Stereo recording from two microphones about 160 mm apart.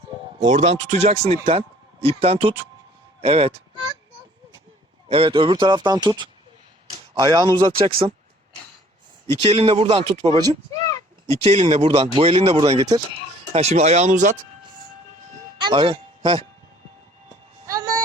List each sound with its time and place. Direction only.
0.4 s a man's voice: 45° right (ahead or behind)
5.0 s speech: 35° right (ahead or behind)
9.4 s speech: 35° right (ahead or behind)
15.6 s speech: 30° right (ahead or behind)
17.7 s music: 25° right (ahead or behind)